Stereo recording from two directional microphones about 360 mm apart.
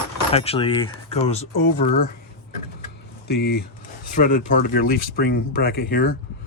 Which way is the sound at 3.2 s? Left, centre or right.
Left.